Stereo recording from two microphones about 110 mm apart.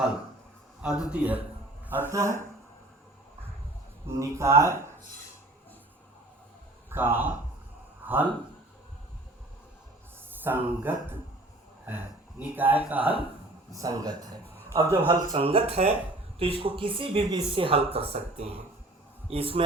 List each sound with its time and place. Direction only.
1.1 s speech: 15° right (ahead or behind)
4.0 s speech: 25° right (ahead or behind)
6.9 s a man's voice: 20° right (ahead or behind)
10.4 s speech: 20° right (ahead or behind)
13.7 s speech: 30° right (ahead or behind)
14.4 s a sound: 15° left (ahead or behind)
14.7 s speech: 25° right (ahead or behind)
15.3 s speech: 55° right (ahead or behind)
16.4 s speech: 55° right (ahead or behind)
17.5 s speech: 55° right (ahead or behind)